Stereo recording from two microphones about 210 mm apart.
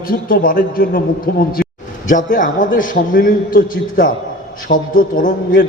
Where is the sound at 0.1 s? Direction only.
45° left (ahead or behind).